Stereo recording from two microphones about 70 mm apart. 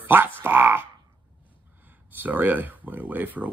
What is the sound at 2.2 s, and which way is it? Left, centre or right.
Speech, right.